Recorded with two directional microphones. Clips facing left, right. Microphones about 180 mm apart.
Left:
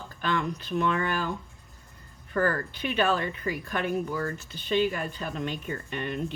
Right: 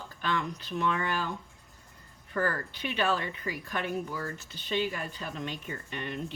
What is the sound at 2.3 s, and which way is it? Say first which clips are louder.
A woman's voice: left 4 dB; 55° left (ahead or behind).